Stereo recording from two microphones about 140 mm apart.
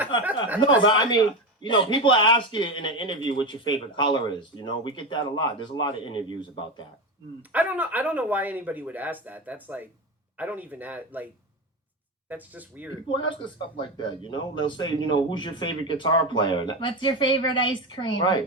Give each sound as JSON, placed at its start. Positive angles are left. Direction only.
{"t": 0.4, "sound": "speech", "side_deg": -10}
{"t": 0.8, "sound": "speech", "side_deg": 35}
{"t": 7.5, "sound": "speech", "side_deg": -10}
{"t": 12.3, "sound": "speech", "side_deg": -10}
{"t": 13.1, "sound": "speech", "side_deg": 35}